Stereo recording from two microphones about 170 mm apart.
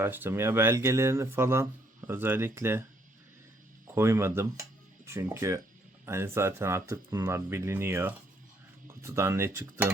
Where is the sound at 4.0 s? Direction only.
15° right (ahead or behind).